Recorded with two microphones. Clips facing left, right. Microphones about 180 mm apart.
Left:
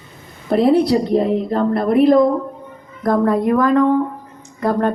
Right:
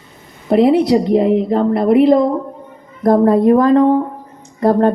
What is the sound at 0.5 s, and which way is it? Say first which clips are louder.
Speech: right 3 dB; 20° right (ahead or behind).